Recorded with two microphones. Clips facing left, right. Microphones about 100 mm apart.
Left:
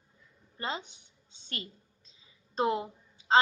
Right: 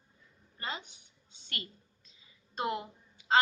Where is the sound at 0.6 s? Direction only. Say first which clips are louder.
Left 4 dB; 30° left (ahead or behind).